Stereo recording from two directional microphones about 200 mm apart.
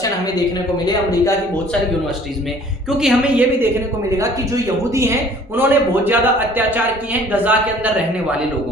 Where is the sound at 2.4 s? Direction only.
5° right (ahead or behind).